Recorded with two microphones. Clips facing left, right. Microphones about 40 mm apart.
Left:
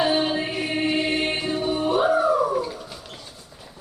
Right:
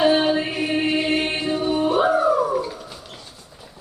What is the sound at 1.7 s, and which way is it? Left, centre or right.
Music, right.